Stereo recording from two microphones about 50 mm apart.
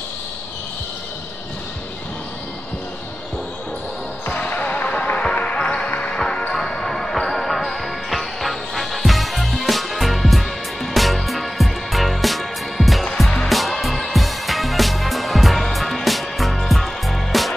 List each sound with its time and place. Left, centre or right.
4.3 s basketball bounce: left
6.1 s music: centre